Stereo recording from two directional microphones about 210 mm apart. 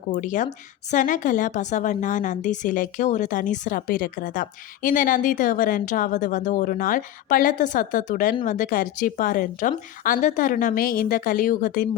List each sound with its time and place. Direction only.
0.1 s a woman's voice: 40° left (ahead or behind)